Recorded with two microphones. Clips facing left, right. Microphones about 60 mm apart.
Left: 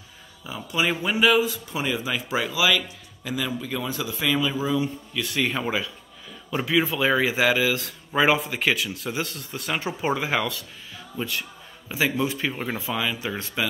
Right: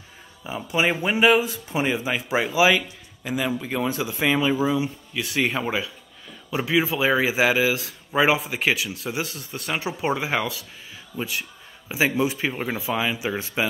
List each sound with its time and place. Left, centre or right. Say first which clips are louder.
0.4 s speech: right 3 dB; right
4.6 s speech: right 2 dB; centre